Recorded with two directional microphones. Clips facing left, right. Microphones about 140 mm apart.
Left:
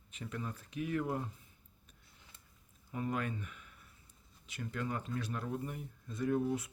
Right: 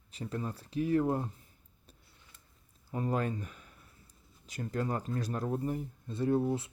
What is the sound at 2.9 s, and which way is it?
Speech, 35° right (ahead or behind).